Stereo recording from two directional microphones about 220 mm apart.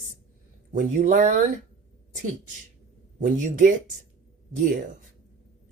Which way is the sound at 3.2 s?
35° right (ahead or behind).